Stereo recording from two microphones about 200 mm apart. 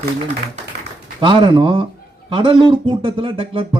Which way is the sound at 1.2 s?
25° right (ahead or behind).